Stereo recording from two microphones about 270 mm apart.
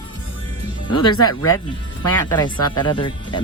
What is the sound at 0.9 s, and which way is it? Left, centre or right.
Speech, left.